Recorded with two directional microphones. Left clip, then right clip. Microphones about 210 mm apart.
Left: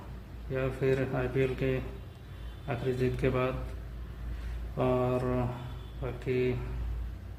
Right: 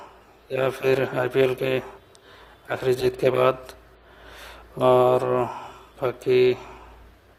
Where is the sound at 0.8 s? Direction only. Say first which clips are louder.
Right 6 dB; 50° right (ahead or behind).